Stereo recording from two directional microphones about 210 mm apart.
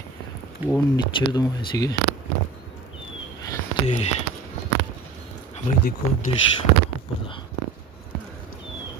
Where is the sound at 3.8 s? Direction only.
30° left (ahead or behind).